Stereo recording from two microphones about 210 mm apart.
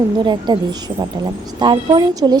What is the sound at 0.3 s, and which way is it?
A woman's voice, 20° right (ahead or behind).